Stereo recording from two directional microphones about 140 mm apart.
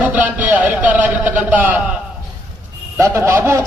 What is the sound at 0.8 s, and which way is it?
A man's voice, 10° right (ahead or behind).